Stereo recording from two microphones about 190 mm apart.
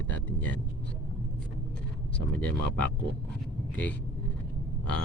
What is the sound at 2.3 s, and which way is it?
Speech, 10° left (ahead or behind).